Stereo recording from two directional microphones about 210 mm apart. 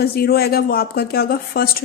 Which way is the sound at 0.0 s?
45° left (ahead or behind).